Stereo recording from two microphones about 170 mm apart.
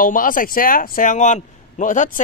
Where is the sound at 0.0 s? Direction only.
55° left (ahead or behind).